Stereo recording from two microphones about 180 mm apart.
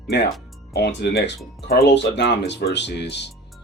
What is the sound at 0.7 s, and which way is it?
Speech, 70° left (ahead or behind).